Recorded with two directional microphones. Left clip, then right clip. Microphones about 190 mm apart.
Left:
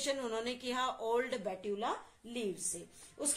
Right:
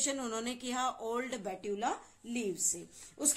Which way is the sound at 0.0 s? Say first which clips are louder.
Even; 25° right (ahead or behind).